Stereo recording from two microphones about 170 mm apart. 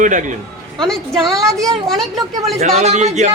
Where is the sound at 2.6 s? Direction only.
40° right (ahead or behind).